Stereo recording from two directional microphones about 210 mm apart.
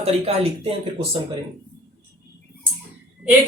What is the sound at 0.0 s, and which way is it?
Speech, 30° right (ahead or behind).